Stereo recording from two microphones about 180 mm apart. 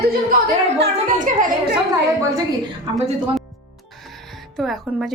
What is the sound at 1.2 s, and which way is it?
Speech, 50° right (ahead or behind).